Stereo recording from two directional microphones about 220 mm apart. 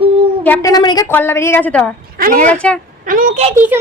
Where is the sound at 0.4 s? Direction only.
10° left (ahead or behind).